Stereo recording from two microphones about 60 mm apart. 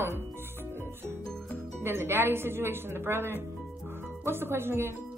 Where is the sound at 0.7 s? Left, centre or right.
Right.